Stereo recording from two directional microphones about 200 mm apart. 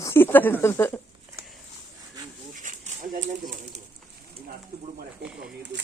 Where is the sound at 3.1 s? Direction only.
40° right (ahead or behind).